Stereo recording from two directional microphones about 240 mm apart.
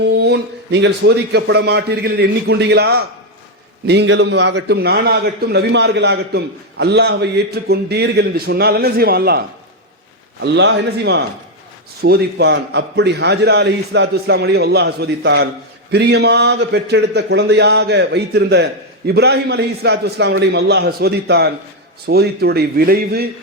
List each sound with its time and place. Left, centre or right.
0.0 s a man's voice: right
10.4 s a man's voice: right